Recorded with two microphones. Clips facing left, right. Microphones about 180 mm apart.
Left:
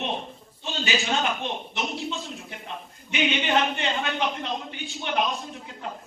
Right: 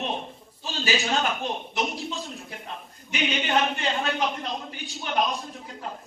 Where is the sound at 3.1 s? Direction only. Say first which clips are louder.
Left 2 dB; centre (ahead or behind).